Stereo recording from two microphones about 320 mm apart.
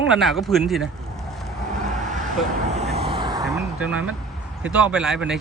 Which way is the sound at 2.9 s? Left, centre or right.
Centre.